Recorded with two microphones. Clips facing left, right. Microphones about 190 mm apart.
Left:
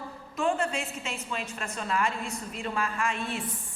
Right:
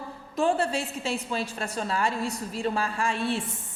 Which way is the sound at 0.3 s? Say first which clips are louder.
Right 3 dB; 35° right (ahead or behind).